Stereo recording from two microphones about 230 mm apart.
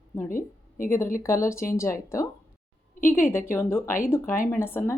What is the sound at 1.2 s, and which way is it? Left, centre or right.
A woman's voice, centre.